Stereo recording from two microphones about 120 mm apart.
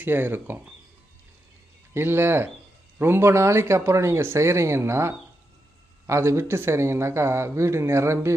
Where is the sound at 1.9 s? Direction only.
20° right (ahead or behind).